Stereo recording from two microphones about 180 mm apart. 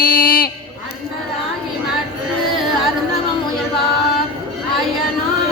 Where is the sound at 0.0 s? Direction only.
55° left (ahead or behind).